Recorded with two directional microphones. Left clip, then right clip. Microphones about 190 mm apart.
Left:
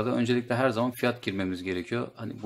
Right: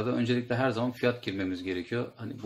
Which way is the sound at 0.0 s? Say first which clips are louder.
Left 2 dB; 35° left (ahead or behind).